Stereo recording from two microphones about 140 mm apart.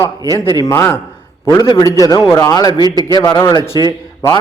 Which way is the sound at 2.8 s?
30° right (ahead or behind).